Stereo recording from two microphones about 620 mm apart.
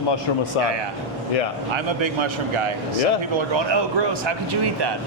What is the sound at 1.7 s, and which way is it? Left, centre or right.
A man's voice, right.